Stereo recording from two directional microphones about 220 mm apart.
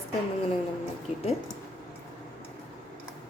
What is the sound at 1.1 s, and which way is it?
Speech, 30° left (ahead or behind).